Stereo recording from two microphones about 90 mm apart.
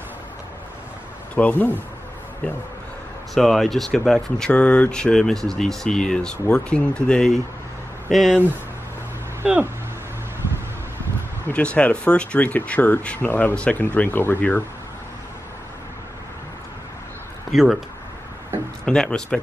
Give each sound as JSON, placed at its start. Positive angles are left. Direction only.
{"t": 1.3, "sound": "speech", "side_deg": 20}
{"t": 3.3, "sound": "speech", "side_deg": 0}
{"t": 4.5, "sound": "speech", "side_deg": 15}
{"t": 9.4, "sound": "speech", "side_deg": -20}
{"t": 11.4, "sound": "speech", "side_deg": 15}
{"t": 17.5, "sound": "speech", "side_deg": -5}
{"t": 18.9, "sound": "speech", "side_deg": 10}